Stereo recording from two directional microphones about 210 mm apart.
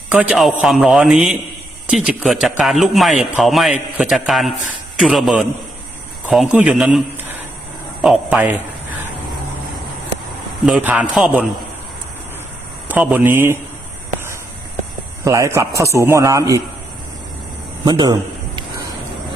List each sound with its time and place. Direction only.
0.1 s speech: 5° right (ahead or behind)
8.0 s a man's voice: 5° right (ahead or behind)
10.7 s a man's voice: 5° right (ahead or behind)
12.9 s a man's voice: 5° right (ahead or behind)
15.2 s a man's voice: 15° right (ahead or behind)
17.8 s a sound: 20° right (ahead or behind)